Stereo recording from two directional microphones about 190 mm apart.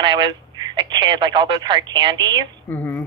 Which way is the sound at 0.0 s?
25° right (ahead or behind).